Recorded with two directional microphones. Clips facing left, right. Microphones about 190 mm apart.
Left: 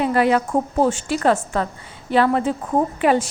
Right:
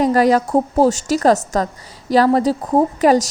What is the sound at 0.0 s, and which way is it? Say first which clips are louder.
A woman's voice: right 4 dB; 40° right (ahead or behind).